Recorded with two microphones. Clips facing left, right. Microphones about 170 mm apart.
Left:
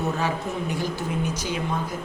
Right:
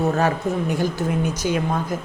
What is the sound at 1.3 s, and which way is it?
Speech, 45° right (ahead or behind).